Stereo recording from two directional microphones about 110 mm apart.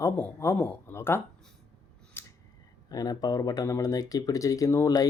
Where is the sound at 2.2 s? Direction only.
20° left (ahead or behind).